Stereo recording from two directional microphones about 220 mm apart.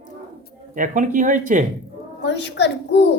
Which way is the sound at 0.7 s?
35° right (ahead or behind).